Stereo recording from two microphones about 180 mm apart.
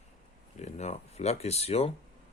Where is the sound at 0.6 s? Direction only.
40° left (ahead or behind).